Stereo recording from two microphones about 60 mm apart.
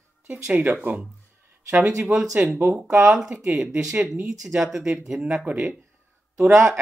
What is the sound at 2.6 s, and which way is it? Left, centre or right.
Speech, right.